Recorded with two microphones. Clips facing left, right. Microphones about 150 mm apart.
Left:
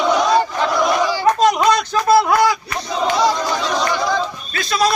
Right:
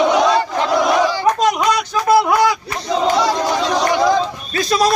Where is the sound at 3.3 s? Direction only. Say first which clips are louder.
Right 3 dB; 35° right (ahead or behind).